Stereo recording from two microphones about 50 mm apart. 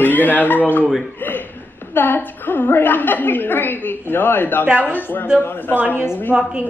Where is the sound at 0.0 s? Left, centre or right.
Left.